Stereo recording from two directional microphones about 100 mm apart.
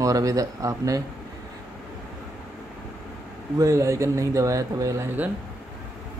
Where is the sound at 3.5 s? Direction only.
35° right (ahead or behind).